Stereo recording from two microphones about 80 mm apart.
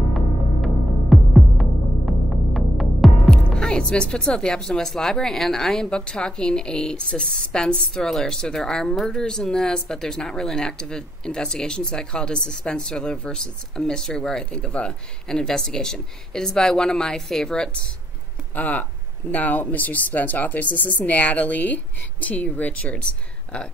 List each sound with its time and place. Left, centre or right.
1.1 s throbbing: centre
8.9 s speech: centre
18.5 s speech: centre